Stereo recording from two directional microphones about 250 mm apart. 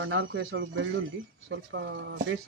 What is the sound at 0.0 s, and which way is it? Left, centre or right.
Speech, right.